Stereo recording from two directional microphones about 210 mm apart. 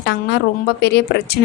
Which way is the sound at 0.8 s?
50° left (ahead or behind).